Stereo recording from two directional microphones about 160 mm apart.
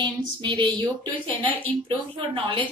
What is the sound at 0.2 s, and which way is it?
A woman's voice, 30° right (ahead or behind).